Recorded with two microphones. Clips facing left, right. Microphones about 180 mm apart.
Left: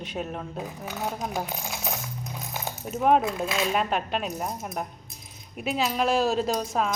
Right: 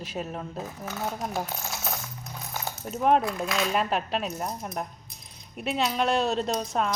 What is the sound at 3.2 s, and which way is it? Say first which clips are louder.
Speech: left 1 dB; 25° left (ahead or behind).